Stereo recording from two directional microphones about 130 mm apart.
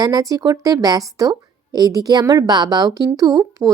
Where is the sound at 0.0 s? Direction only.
30° right (ahead or behind).